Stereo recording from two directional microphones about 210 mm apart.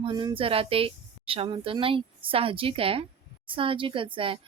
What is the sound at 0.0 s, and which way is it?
Speech, 20° right (ahead or behind).